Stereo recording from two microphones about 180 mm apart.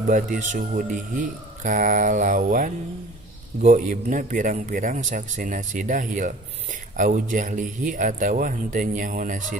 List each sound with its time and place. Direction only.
0.0 s speech: 45° right (ahead or behind)